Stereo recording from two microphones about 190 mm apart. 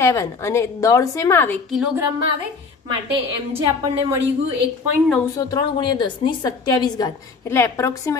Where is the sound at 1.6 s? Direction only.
Centre (ahead or behind).